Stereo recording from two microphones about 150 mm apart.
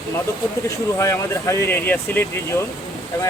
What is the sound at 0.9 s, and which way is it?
Speech, 20° left (ahead or behind).